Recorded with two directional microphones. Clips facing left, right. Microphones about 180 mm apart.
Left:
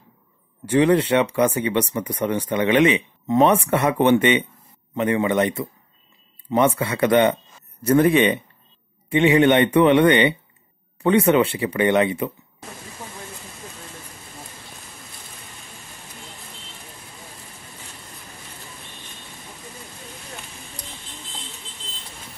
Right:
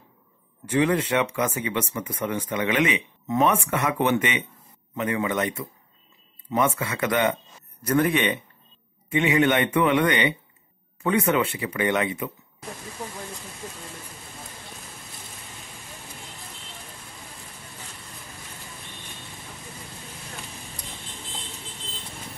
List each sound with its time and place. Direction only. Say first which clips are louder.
0.7 s speech: left 5 dB; 35° left (ahead or behind)